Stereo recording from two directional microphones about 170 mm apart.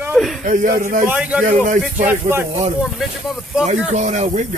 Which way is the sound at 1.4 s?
50° right (ahead or behind).